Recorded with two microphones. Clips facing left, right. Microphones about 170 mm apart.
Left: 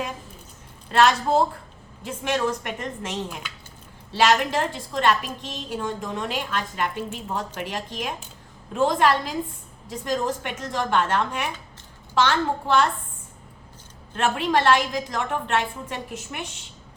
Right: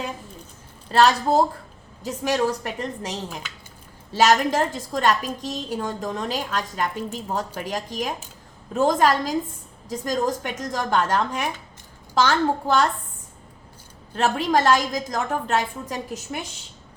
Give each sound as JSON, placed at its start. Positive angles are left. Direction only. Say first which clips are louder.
{"t": 0.9, "sound": "a woman's voice", "louder": "right 1 dB", "side_deg": -35}
{"t": 14.2, "sound": "a woman's voice", "louder": "right 2 dB", "side_deg": -40}